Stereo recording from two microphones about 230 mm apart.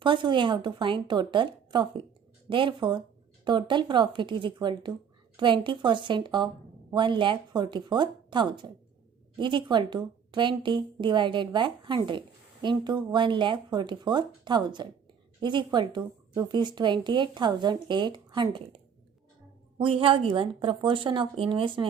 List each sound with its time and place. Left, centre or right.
0.0 s speech: centre
19.8 s speech: right